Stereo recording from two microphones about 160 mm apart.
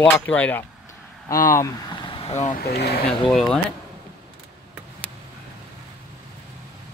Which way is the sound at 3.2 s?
5° left (ahead or behind).